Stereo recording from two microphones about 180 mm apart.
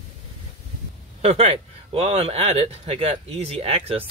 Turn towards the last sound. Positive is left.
turn(degrees=-35)  # may be behind; listen again after turning